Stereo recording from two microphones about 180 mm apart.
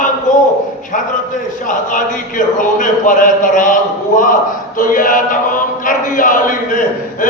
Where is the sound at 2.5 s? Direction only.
45° left (ahead or behind).